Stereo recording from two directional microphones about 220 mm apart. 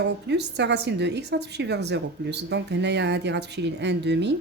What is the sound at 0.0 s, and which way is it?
A woman's voice, 50° right (ahead or behind).